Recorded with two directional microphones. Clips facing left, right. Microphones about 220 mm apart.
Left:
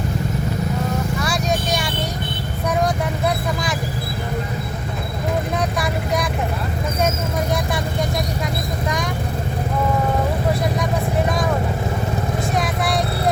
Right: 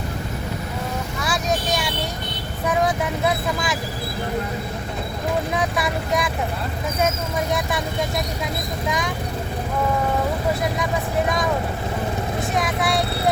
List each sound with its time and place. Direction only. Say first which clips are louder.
1.2 s vehicle: left 2 dB; centre (ahead or behind)
2.6 s speech: even; centre (ahead or behind)
5.5 s speech: left 1 dB; centre (ahead or behind)
12.5 s vehicle: right 1 dB; centre (ahead or behind)